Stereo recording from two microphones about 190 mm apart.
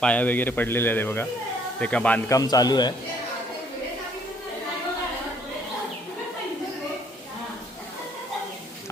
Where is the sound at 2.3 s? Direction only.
20° left (ahead or behind).